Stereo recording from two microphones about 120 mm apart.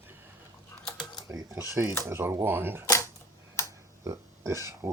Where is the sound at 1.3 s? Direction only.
25° right (ahead or behind).